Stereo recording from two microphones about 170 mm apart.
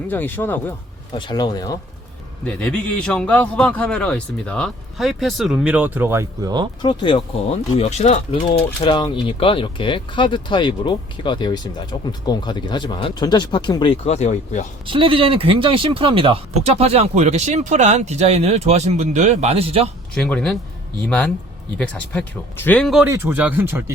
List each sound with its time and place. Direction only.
0.1 s speech: 10° left (ahead or behind)
1.1 s speech: 25° left (ahead or behind)
2.4 s a man's voice: 5° left (ahead or behind); by 6.7 s 20° right (ahead or behind)
6.8 s speech: 30° left (ahead or behind)
14.8 s speech: 30° right (ahead or behind)
20.1 s a man's voice: 5° left (ahead or behind)
23.0 s speech: 15° right (ahead or behind)